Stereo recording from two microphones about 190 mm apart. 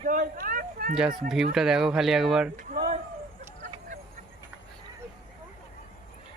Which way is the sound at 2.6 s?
45° right (ahead or behind).